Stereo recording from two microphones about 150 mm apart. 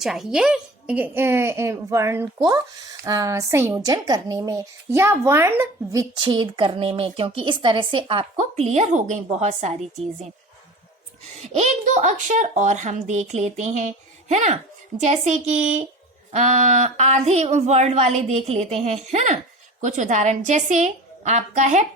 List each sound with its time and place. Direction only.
0.0 s a woman's voice: 5° right (ahead or behind); by 9.7 s 50° right (ahead or behind)
11.4 s speech: 50° right (ahead or behind)